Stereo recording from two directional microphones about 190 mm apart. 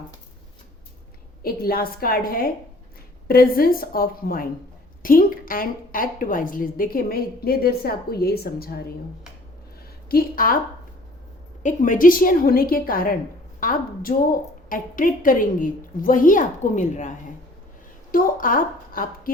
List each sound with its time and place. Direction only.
1.4 s a woman's voice: 50° left (ahead or behind)
10.1 s a woman's voice: 50° left (ahead or behind)
11.6 s a woman's voice: 45° left (ahead or behind)